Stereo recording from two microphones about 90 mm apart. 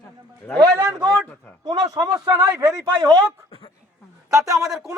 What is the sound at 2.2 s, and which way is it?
Speech, 30° right (ahead or behind).